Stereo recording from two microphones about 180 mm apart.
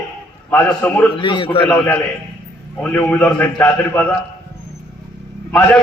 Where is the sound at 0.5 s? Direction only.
10° left (ahead or behind).